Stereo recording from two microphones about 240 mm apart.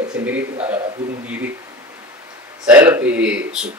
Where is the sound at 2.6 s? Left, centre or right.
Centre.